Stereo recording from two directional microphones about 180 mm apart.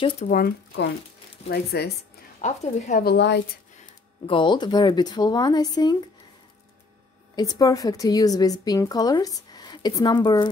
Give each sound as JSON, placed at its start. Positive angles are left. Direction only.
{"t": 0.3, "sound": "speech", "side_deg": 55}
{"t": 2.4, "sound": "speech", "side_deg": 40}
{"t": 3.0, "sound": "a woman's voice", "side_deg": 65}
{"t": 4.3, "sound": "a woman's voice", "side_deg": 25}
{"t": 7.3, "sound": "a woman's voice", "side_deg": 20}